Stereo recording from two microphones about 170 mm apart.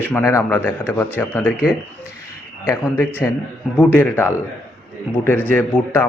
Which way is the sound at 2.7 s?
15° left (ahead or behind).